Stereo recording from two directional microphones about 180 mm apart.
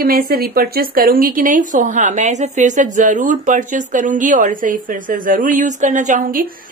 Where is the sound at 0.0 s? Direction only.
55° right (ahead or behind).